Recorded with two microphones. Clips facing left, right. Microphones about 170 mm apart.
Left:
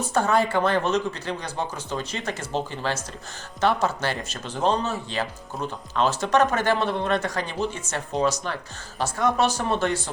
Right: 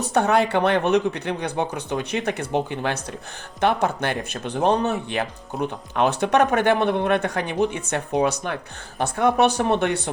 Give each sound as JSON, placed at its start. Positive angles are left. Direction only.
{"t": 0.0, "sound": "speech", "side_deg": -65}